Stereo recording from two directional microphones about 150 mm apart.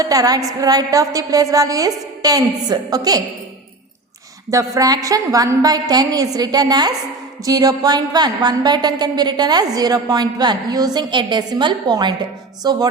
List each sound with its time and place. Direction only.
0.0 s a woman's voice: 25° right (ahead or behind)
4.5 s a woman's voice: 20° right (ahead or behind)